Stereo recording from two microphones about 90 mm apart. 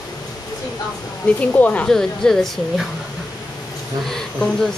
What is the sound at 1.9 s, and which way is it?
Speech, 5° left (ahead or behind).